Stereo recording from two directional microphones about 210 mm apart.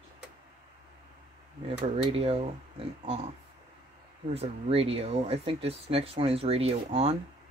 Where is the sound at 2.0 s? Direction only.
30° right (ahead or behind).